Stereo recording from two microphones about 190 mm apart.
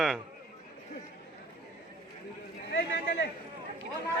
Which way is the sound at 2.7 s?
65° left (ahead or behind).